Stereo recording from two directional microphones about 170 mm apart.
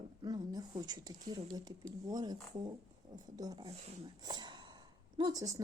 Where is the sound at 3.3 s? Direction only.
20° right (ahead or behind).